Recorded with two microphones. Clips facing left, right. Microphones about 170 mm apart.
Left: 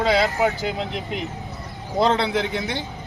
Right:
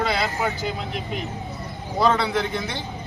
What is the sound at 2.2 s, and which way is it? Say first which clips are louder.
Speech: left 1 dB; 20° left (ahead or behind).